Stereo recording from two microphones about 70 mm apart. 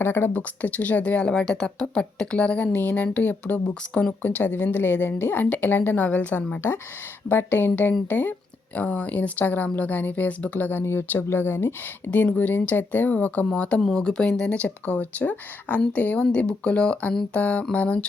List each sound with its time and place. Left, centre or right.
0.0 s speech: left
0.3 s a woman's voice: left